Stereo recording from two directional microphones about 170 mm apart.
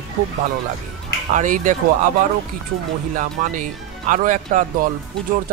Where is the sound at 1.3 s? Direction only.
50° right (ahead or behind).